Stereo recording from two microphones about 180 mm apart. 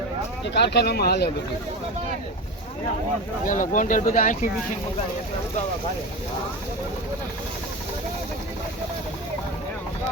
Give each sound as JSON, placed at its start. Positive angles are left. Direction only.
{"t": 0.4, "sound": "speech", "side_deg": 70}
{"t": 3.4, "sound": "speech", "side_deg": 45}